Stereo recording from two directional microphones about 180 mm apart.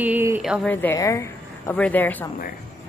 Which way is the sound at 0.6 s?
15° left (ahead or behind).